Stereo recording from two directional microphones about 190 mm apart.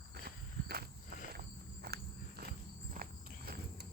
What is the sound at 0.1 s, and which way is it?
Walk, 55° right (ahead or behind).